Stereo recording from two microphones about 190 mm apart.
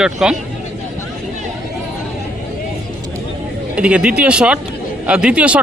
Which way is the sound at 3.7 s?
5° right (ahead or behind).